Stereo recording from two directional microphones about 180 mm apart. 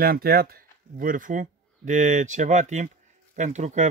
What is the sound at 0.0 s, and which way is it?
A man's voice, 55° right (ahead or behind).